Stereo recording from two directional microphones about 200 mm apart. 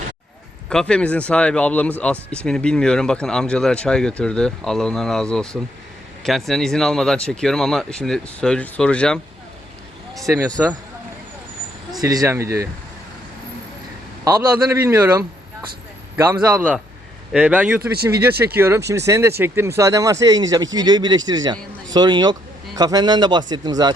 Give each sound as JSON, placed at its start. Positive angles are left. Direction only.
{"t": 0.7, "sound": "speech", "side_deg": 5}
{"t": 10.2, "sound": "speech", "side_deg": -15}
{"t": 11.9, "sound": "speech", "side_deg": -15}
{"t": 14.3, "sound": "speech", "side_deg": -15}
{"t": 17.9, "sound": "speech", "side_deg": -50}
{"t": 18.2, "sound": "a man's voice", "side_deg": -10}